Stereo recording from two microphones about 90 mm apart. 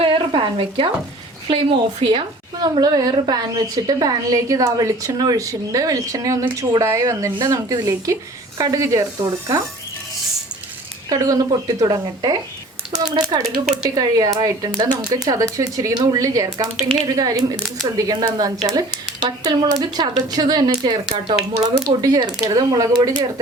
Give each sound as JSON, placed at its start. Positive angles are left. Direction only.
{"t": 0.3, "sound": "frying", "side_deg": -70}
{"t": 1.5, "sound": "a woman's voice", "side_deg": -75}
{"t": 2.8, "sound": "a woman's voice", "side_deg": -45}
{"t": 11.1, "sound": "speech", "side_deg": -45}